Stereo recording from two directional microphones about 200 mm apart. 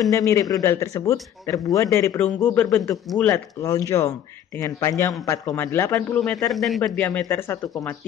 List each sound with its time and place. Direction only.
0.1 s a man's voice: 15° left (ahead or behind)